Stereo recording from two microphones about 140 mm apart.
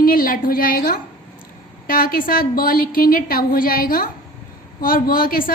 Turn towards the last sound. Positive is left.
turn(degrees=90)